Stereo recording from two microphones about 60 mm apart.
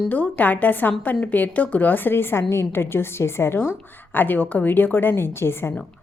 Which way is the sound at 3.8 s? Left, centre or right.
Left.